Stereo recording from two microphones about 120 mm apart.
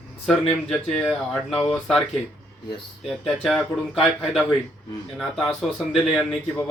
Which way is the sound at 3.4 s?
Centre (ahead or behind).